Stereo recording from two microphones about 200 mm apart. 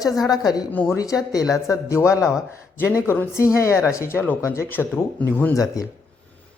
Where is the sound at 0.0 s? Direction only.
20° left (ahead or behind).